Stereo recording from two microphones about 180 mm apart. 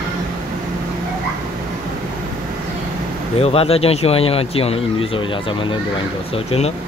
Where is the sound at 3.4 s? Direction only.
35° left (ahead or behind).